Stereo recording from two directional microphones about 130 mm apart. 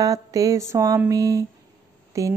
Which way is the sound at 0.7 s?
25° right (ahead or behind).